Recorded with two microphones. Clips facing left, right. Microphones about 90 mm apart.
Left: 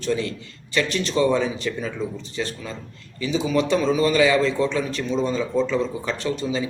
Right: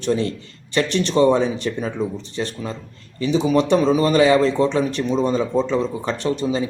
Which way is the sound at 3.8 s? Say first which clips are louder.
Right 3 dB; 35° right (ahead or behind).